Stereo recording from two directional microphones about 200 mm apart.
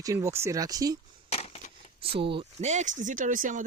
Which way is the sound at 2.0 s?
25° right (ahead or behind).